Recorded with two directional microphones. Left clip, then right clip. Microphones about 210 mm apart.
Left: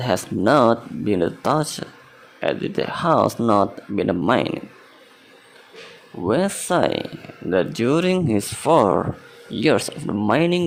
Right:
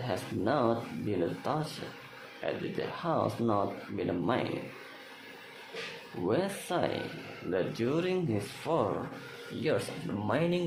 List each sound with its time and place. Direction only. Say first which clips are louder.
0.0 s speech: left 13 dB; 40° left (ahead or behind)
6.2 s speech: left 11 dB; 35° left (ahead or behind)